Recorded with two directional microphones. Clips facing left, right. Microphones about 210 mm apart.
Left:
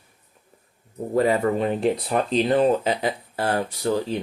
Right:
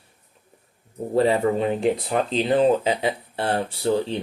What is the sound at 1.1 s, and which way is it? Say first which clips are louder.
Speech: right 1 dB; 30° right (ahead or behind).